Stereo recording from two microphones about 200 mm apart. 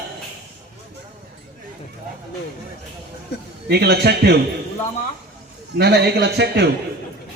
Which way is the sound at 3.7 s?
55° right (ahead or behind).